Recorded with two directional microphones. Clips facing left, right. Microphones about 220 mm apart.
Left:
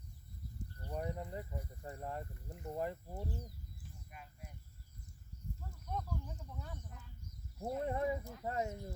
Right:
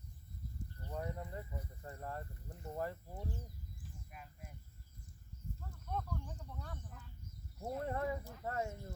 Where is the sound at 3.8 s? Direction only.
Centre (ahead or behind).